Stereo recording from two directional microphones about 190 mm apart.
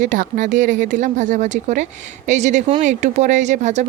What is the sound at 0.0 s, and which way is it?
Speech, 45° right (ahead or behind).